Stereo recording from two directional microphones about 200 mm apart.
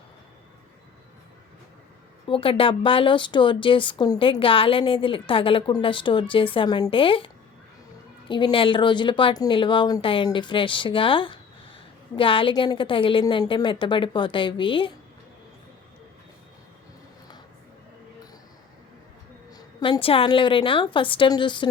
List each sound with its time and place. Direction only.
2.2 s speech: 25° left (ahead or behind)
8.3 s speech: 25° left (ahead or behind)
19.5 s speech: 20° left (ahead or behind)